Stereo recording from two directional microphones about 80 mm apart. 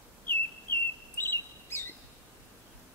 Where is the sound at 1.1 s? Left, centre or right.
Left.